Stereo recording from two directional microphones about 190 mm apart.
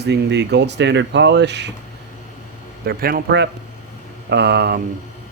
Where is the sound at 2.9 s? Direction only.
50° right (ahead or behind).